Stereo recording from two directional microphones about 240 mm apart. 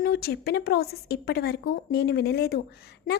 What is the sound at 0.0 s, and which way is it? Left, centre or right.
A woman's voice, left.